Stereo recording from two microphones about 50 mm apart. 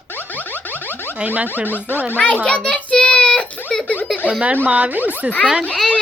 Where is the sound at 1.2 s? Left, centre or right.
Right.